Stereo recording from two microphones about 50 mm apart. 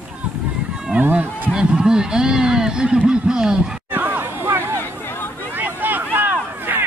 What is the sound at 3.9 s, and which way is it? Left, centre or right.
Chatter, right.